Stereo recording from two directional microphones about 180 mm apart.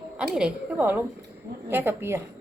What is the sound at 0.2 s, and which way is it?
A woman's voice, 5° right (ahead or behind).